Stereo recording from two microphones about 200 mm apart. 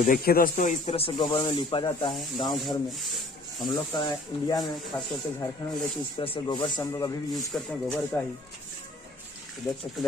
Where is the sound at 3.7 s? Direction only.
20° left (ahead or behind).